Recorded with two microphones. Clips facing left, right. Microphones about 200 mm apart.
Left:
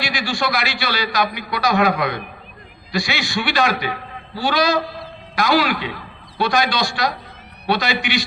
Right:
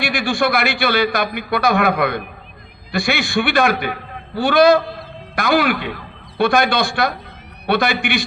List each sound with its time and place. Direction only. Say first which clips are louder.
0.0 s a man's voice: right 5 dB; 55° right (ahead or behind)